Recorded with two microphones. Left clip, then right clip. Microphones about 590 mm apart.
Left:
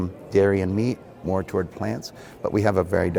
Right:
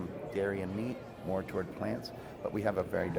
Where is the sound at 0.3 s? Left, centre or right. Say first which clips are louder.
Left 15 dB; left.